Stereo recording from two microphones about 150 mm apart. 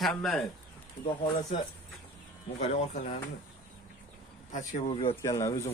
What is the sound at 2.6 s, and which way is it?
Speech, 45° left (ahead or behind).